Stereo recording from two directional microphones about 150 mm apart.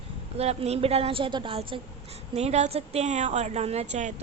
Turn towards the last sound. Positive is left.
turn(degrees=-50)  # may be behind; listen again after turning